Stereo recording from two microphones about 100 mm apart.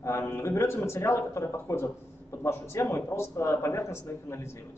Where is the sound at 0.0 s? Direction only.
25° left (ahead or behind).